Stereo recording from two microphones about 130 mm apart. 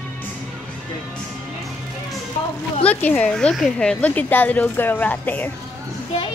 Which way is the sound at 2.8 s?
10° left (ahead or behind).